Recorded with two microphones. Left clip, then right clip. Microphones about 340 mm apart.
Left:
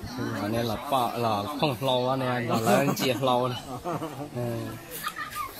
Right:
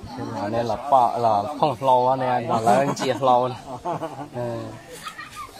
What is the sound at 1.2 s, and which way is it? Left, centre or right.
Speech, right.